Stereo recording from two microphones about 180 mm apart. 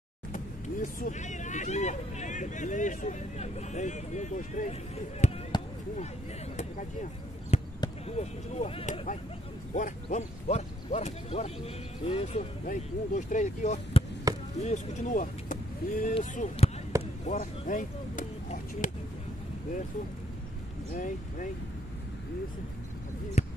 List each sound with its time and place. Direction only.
0.9 s speech: 45° left (ahead or behind)
6.5 s a sound: 45° left (ahead or behind)
7.5 s basketball bounce: 35° left (ahead or behind)
8.2 s speech: 35° left (ahead or behind)
9.8 s speech: 40° left (ahead or behind)
14.3 s chop: 20° right (ahead or behind)
14.6 s speech: 40° left (ahead or behind)
16.2 s speech: 35° left (ahead or behind)
20.9 s speech: 45° left (ahead or behind)
23.4 s basketball bounce: 40° left (ahead or behind)